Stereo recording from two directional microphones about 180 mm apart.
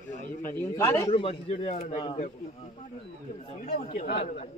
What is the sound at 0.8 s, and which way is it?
Speech, 15° left (ahead or behind).